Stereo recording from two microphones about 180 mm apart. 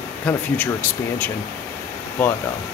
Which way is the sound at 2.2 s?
10° left (ahead or behind).